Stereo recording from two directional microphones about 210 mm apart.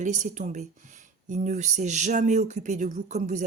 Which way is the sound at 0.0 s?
35° right (ahead or behind).